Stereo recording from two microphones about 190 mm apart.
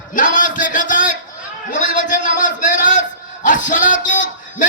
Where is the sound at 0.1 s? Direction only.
45° left (ahead or behind).